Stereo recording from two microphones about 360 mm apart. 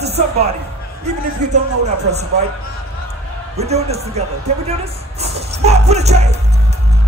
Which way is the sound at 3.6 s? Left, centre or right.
Centre.